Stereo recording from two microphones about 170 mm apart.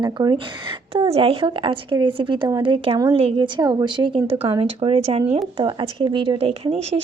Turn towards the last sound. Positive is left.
turn(degrees=-30)  # may be behind; listen again after turning